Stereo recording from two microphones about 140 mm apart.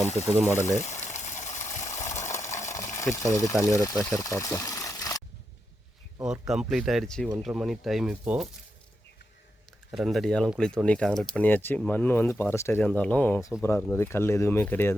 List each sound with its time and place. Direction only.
0.3 s speech: 15° right (ahead or behind)
0.5 s speech: 20° left (ahead or behind)
0.9 s a sound: 60° left (ahead or behind)
2.7 s speech: 20° left (ahead or behind)
6.5 s speech: centre (ahead or behind)
9.9 s speech: centre (ahead or behind)